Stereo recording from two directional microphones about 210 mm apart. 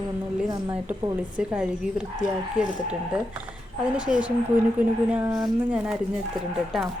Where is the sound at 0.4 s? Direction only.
20° right (ahead or behind).